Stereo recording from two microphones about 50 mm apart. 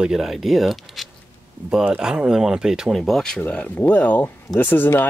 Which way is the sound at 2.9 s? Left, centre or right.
Centre.